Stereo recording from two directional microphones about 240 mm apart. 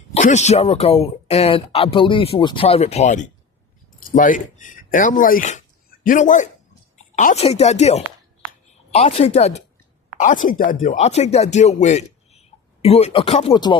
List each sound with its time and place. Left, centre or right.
0.1 s speech: left